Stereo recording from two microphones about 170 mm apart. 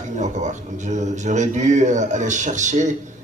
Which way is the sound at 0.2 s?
45° right (ahead or behind).